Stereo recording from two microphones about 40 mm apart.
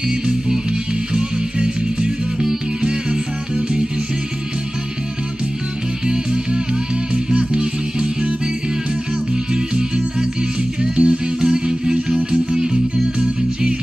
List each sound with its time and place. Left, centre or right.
1.1 s music: right
6.0 s music: right
9.5 s music: centre
10.8 s music: right